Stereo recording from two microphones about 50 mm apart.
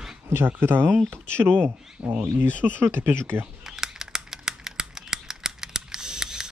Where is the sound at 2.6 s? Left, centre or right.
Right.